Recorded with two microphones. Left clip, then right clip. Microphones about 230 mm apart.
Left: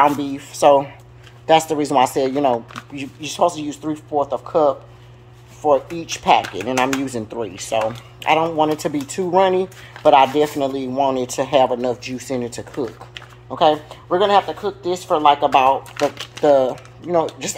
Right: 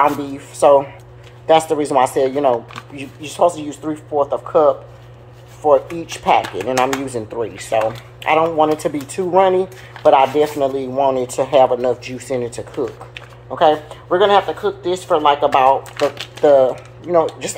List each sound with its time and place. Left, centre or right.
0.0 s speech: left